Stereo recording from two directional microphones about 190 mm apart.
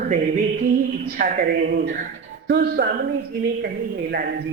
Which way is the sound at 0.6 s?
45° right (ahead or behind).